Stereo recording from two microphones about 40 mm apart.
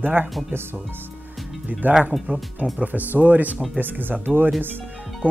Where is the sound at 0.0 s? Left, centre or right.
Right.